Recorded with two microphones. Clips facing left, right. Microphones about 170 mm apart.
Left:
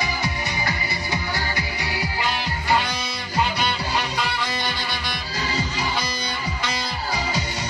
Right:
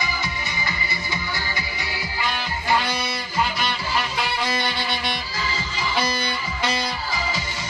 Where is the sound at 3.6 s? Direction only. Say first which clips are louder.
Left 2 dB; 35° left (ahead or behind).